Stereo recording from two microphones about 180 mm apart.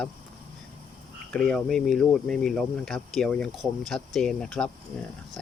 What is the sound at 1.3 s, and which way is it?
Speech, 5° left (ahead or behind).